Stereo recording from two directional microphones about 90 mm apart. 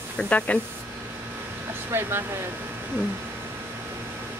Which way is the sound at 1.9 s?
25° right (ahead or behind).